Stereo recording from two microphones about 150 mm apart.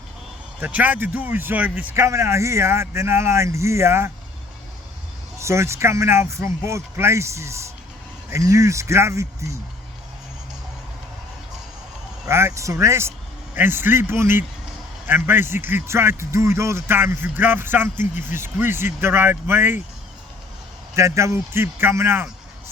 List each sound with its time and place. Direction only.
0.6 s speech: 10° right (ahead or behind)
5.4 s speech: 20° right (ahead or behind)
12.3 s speech: 15° right (ahead or behind)
18.0 s speech: 55° left (ahead or behind)
18.4 s speech: 15° right (ahead or behind)
20.9 s speech: 20° right (ahead or behind)